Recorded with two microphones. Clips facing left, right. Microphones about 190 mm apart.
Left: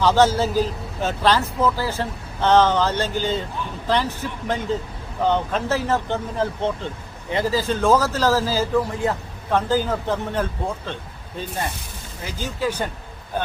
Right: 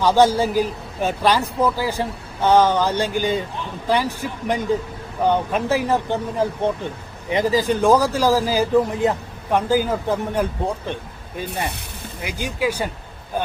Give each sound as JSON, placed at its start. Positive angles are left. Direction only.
{"t": 0.0, "sound": "speech", "side_deg": -15}
{"t": 12.2, "sound": "speech", "side_deg": -15}